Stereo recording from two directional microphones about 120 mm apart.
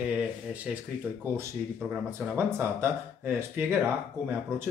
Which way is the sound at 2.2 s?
20° right (ahead or behind).